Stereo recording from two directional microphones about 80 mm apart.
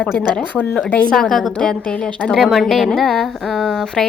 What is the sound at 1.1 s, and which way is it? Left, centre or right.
A woman's voice, centre.